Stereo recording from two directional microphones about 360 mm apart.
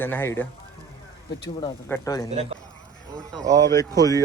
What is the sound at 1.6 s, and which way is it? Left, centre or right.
Speech, centre.